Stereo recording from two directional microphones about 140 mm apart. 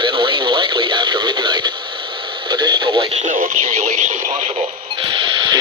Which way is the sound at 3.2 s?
75° right (ahead or behind).